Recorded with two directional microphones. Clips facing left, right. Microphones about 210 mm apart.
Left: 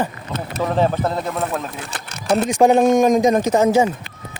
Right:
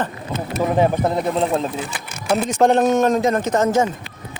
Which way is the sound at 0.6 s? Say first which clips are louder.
Right 1 dB; 15° right (ahead or behind).